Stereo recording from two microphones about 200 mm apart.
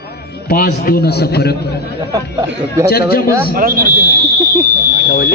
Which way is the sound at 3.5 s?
45° right (ahead or behind).